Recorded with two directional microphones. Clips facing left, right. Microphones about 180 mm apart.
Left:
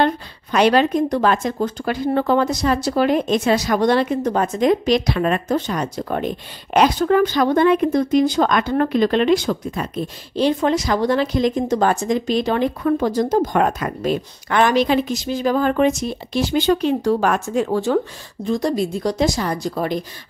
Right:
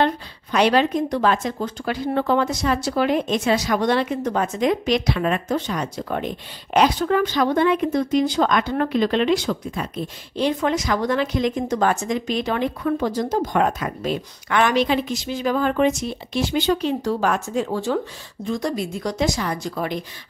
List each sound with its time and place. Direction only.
0.0 s a woman's voice: 50° left (ahead or behind)
10.3 s speech: 35° left (ahead or behind); by 17.9 s 55° left (ahead or behind)
18.4 s speech: 35° left (ahead or behind)